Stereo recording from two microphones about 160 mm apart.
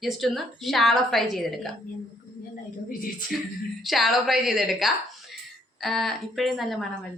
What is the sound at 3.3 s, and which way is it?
A woman's voice, centre (ahead or behind).